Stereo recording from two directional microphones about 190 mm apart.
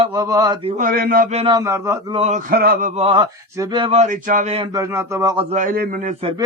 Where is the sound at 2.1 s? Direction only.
30° right (ahead or behind).